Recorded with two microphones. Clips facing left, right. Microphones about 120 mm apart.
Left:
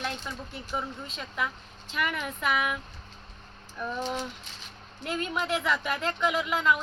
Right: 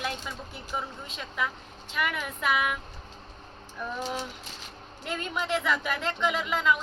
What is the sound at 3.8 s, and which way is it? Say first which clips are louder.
Speech: left 1 dB; 5° right (ahead or behind).